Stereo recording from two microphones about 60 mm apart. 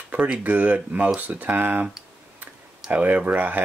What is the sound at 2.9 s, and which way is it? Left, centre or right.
Speech, right.